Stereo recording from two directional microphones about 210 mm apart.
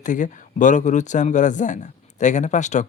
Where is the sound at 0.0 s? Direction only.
35° left (ahead or behind).